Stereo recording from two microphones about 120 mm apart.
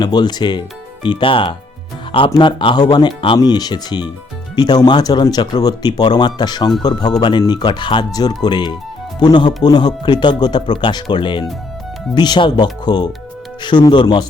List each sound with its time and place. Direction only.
0.0 s speech: 35° left (ahead or behind)